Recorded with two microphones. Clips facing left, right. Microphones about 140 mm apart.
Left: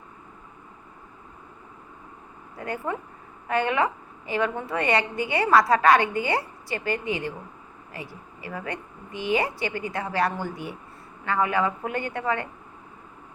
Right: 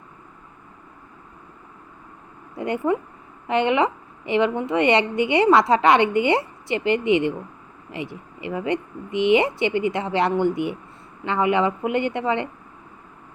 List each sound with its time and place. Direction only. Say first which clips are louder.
2.6 s a woman's voice: right 8 dB; 20° right (ahead or behind)